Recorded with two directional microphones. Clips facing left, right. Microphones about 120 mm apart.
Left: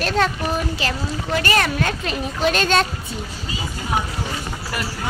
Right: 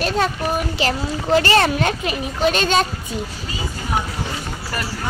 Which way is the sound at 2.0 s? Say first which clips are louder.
Right 2 dB; 5° right (ahead or behind).